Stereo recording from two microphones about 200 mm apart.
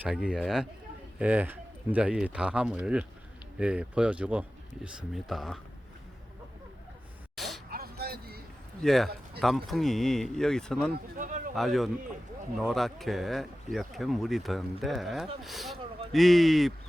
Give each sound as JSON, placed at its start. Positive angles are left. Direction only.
{"t": 0.0, "sound": "speech", "side_deg": -5}
{"t": 7.3, "sound": "a sound", "side_deg": 0}
{"t": 7.7, "sound": "music", "side_deg": -50}
{"t": 8.8, "sound": "speech", "side_deg": 0}
{"t": 11.2, "sound": "a sound", "side_deg": -40}
{"t": 11.5, "sound": "speech", "side_deg": 0}